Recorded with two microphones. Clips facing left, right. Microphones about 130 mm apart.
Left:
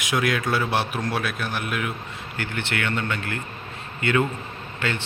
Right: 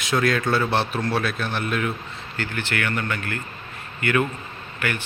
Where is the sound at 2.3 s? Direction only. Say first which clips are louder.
Right 1 dB; 20° left (ahead or behind).